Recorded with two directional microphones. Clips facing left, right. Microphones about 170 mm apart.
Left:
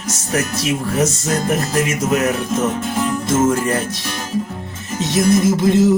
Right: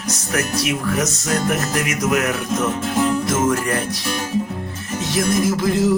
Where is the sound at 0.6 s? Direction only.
30° left (ahead or behind).